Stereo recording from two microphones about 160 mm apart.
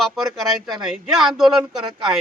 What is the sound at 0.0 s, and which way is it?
Speech, centre (ahead or behind).